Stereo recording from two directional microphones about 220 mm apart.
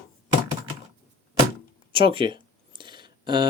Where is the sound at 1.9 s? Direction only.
25° right (ahead or behind).